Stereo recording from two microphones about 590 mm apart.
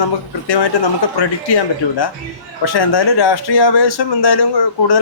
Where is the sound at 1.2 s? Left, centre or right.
Left.